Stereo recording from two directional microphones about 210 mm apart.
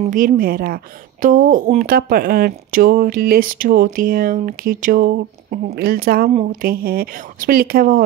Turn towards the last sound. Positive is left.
turn(degrees=-40)  # may be behind; listen again after turning